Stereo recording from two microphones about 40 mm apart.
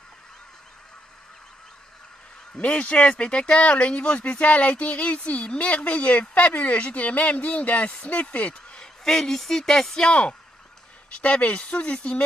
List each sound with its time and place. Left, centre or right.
2.6 s speech: left
9.0 s a sound: centre
10.0 s speech: left